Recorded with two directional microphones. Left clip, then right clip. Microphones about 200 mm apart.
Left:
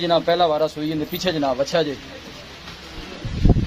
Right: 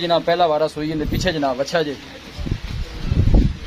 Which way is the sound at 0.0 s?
35° right (ahead or behind).